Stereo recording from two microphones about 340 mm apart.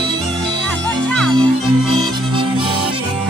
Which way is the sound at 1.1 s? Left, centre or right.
Centre.